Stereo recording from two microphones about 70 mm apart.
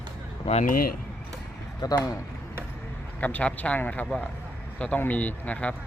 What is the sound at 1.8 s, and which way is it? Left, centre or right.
Speech, left.